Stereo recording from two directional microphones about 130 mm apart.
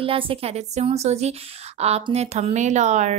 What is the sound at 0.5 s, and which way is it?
A woman's voice, 55° right (ahead or behind).